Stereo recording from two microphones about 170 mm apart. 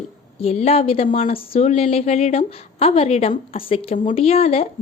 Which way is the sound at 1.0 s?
50° left (ahead or behind).